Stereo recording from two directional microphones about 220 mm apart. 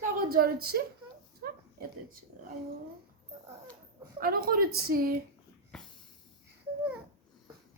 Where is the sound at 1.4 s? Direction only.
40° right (ahead or behind).